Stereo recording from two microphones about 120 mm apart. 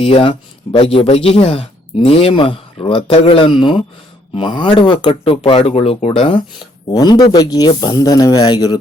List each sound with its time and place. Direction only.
0.0 s speech: 50° left (ahead or behind)
6.9 s speech: 35° left (ahead or behind)